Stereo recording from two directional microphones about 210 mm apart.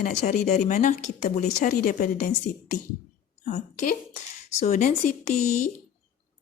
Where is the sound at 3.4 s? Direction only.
35° left (ahead or behind).